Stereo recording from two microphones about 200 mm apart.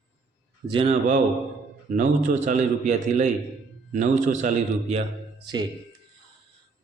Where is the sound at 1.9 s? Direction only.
40° right (ahead or behind).